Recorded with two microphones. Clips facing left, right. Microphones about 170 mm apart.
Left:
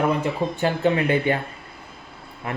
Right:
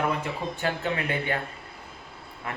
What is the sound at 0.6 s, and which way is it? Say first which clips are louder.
Speech: left 8 dB; 25° left (ahead or behind).